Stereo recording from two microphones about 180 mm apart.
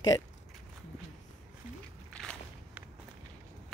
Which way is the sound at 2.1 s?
Centre (ahead or behind).